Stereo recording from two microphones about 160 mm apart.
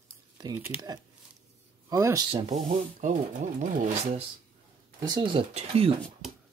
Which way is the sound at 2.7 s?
50° right (ahead or behind).